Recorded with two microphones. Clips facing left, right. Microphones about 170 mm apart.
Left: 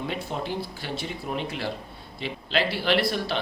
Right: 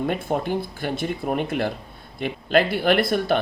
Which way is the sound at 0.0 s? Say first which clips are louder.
Right 7 dB; 50° right (ahead or behind).